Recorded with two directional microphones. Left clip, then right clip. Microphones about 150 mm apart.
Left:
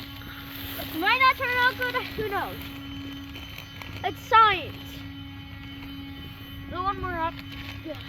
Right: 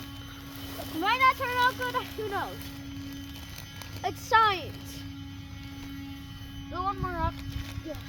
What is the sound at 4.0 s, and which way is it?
Speech, 5° right (ahead or behind).